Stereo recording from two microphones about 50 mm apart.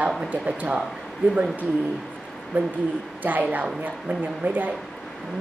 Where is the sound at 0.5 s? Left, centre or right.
Right.